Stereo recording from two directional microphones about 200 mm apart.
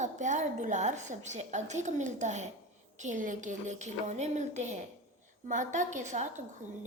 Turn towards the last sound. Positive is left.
turn(degrees=-40)  # may be behind; listen again after turning